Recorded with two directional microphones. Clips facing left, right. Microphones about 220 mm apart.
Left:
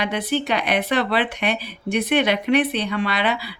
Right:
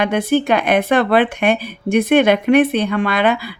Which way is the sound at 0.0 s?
45° right (ahead or behind).